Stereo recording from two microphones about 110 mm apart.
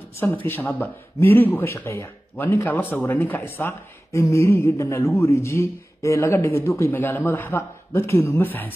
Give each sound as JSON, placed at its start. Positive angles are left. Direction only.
{"t": 0.5, "sound": "speech", "side_deg": 20}